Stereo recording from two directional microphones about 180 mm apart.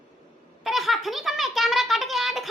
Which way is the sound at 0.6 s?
Centre (ahead or behind).